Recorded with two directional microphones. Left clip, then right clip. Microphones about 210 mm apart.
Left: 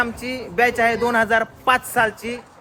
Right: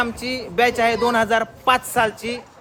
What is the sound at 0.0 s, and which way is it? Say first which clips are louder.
Speech: even; 5° right (ahead or behind).